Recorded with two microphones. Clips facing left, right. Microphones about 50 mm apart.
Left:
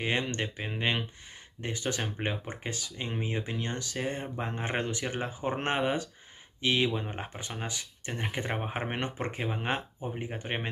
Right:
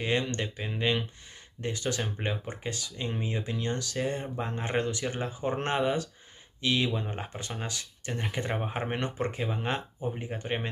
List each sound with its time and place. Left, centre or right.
0.0 s speech: left